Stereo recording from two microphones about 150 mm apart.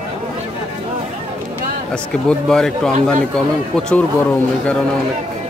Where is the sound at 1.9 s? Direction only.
5° left (ahead or behind).